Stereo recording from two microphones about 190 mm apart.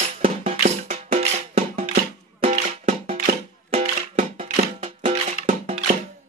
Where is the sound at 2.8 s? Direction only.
35° right (ahead or behind).